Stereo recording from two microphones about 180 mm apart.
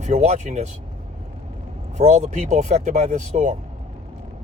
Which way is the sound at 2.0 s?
40° right (ahead or behind).